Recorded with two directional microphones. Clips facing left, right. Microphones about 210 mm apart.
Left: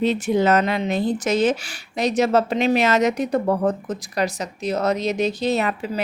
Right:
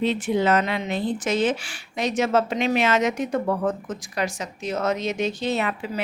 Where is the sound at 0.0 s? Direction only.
40° left (ahead or behind).